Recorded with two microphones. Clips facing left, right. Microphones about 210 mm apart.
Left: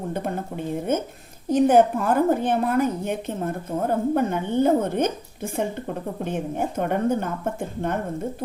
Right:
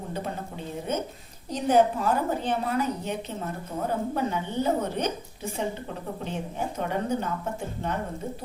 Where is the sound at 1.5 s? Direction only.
50° left (ahead or behind).